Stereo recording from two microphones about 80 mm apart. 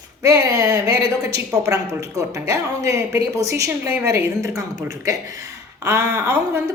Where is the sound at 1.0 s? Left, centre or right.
Right.